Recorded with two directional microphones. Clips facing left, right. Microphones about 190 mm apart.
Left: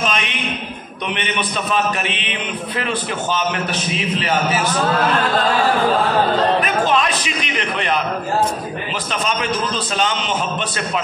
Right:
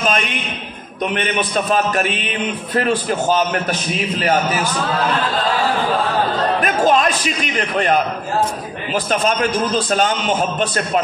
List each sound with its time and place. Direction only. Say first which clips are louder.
0.0 s a man's voice: right 2 dB; 45° right (ahead or behind)
6.6 s a man's voice: right 3 dB; 40° right (ahead or behind)